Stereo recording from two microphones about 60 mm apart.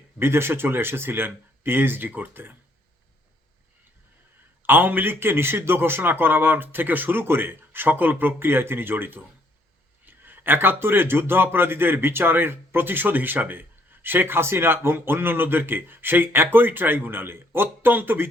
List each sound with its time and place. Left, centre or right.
0.2 s a man's voice: right
4.6 s a man's voice: right